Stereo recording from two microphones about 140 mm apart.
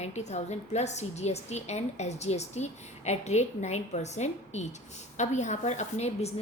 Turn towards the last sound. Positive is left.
turn(degrees=50)  # may be behind; listen again after turning